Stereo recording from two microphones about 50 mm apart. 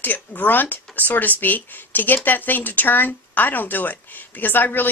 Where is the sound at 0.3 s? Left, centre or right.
Left.